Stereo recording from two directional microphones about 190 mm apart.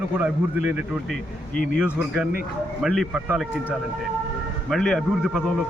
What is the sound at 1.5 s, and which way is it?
Speech, 45° left (ahead or behind).